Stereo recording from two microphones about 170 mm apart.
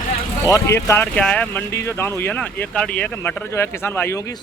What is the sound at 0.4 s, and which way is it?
Speech, 20° left (ahead or behind).